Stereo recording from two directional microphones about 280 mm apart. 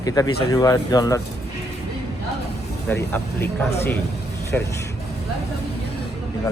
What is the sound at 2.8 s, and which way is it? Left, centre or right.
Speech, centre.